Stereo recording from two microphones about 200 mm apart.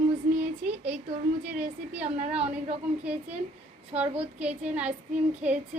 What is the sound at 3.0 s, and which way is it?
A woman's voice, 5° right (ahead or behind).